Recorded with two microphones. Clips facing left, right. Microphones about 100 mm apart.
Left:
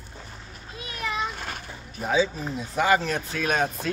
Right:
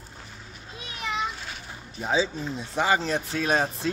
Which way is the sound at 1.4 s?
55° left (ahead or behind).